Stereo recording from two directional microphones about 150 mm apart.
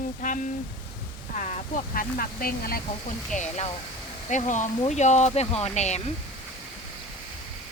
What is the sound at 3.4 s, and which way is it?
Speech, 50° left (ahead or behind).